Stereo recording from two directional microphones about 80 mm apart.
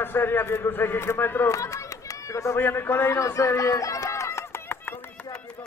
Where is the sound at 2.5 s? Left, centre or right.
Left.